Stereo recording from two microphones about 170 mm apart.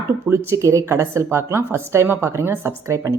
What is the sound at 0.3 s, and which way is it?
A woman's voice, 15° right (ahead or behind).